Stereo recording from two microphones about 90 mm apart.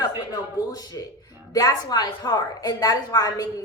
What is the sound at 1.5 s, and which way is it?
A woman's voice, 45° left (ahead or behind).